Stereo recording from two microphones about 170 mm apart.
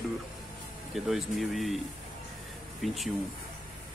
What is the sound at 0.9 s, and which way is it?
Speech, centre (ahead or behind).